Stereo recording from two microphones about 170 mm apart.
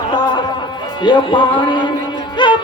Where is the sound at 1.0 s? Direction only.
25° left (ahead or behind).